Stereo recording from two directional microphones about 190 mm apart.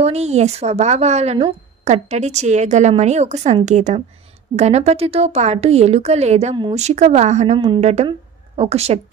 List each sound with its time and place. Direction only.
0.0 s speech: 35° right (ahead or behind)